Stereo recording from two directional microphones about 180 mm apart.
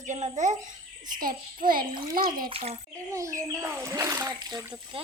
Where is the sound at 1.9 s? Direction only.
25° right (ahead or behind).